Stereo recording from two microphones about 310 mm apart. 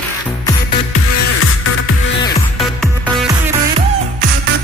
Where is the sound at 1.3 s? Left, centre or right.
Left.